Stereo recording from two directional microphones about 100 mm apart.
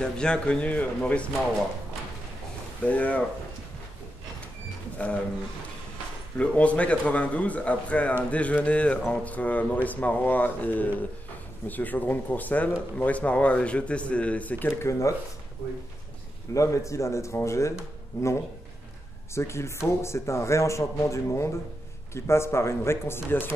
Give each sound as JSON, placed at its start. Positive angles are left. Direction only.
{"t": 0.0, "sound": "speech", "side_deg": 10}
{"t": 2.8, "sound": "speech", "side_deg": 15}
{"t": 4.9, "sound": "speech", "side_deg": 10}
{"t": 6.3, "sound": "speech", "side_deg": 10}
{"t": 16.5, "sound": "speech", "side_deg": 30}
{"t": 19.3, "sound": "speech", "side_deg": 25}